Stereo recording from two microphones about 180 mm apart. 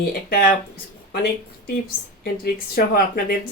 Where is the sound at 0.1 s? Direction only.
55° left (ahead or behind).